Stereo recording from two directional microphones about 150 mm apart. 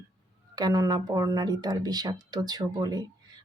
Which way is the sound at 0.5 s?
25° right (ahead or behind).